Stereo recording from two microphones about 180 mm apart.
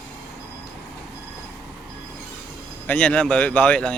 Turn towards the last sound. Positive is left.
turn(degrees=5)  # may be behind; listen again after turning